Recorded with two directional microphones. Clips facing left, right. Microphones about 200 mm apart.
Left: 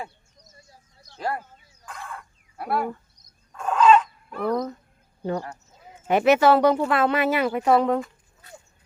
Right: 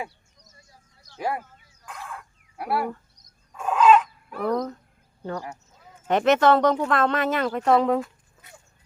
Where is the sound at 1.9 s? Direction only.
5° right (ahead or behind).